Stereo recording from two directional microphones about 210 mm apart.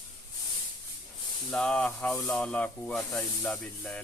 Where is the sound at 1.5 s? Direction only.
5° left (ahead or behind).